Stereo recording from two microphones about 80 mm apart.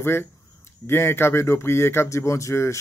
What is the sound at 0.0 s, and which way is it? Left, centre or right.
Speech, left.